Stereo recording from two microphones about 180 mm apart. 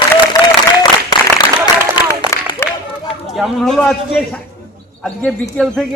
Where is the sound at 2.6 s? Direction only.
15° left (ahead or behind).